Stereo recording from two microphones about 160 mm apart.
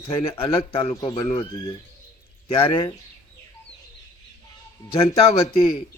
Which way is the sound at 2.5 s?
35° left (ahead or behind).